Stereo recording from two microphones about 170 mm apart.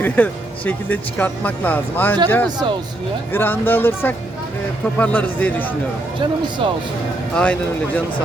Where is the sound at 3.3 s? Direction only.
10° left (ahead or behind).